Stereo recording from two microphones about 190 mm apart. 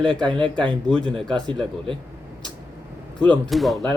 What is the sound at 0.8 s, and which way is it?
Speech, 5° left (ahead or behind).